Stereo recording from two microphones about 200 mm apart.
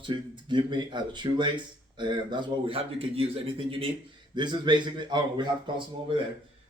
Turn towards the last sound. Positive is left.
turn(degrees=-25)  # may be behind; listen again after turning